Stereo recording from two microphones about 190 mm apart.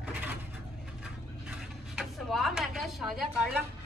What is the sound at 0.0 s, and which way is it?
Vehicle, 10° right (ahead or behind).